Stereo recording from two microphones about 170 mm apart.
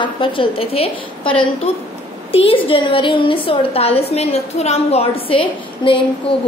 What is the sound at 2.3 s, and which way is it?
A woman's voice, 35° left (ahead or behind).